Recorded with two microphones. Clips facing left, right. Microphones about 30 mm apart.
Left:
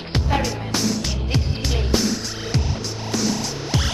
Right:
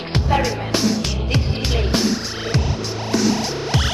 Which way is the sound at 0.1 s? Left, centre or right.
Centre.